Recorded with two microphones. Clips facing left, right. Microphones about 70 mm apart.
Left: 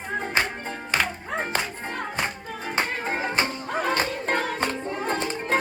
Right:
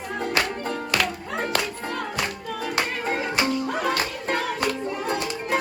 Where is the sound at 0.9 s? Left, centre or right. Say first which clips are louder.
Left 2 dB; centre.